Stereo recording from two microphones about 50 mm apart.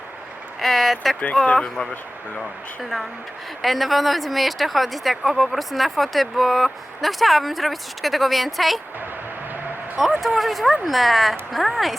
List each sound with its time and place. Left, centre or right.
0.6 s speech: centre
1.2 s speech: left
1.5 s speech: centre
3.6 s speech: centre
10.0 s speech: centre